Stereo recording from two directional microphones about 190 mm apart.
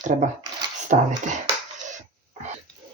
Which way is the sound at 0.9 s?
45° right (ahead or behind).